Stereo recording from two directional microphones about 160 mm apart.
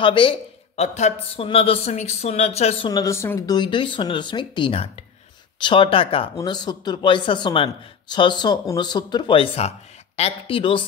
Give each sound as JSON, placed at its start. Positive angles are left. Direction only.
{"t": 0.0, "sound": "speech", "side_deg": 35}
{"t": 2.9, "sound": "a man's voice", "side_deg": 20}